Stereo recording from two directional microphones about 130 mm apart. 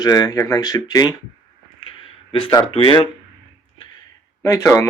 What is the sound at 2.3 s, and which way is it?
Speech, 40° left (ahead or behind).